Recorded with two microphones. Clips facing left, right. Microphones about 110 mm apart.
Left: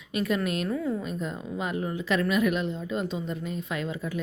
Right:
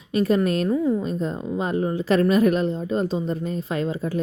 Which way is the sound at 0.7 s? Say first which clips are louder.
Right 7 dB; 20° right (ahead or behind).